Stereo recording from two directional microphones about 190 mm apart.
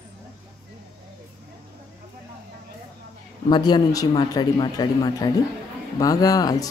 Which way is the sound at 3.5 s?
20° left (ahead or behind).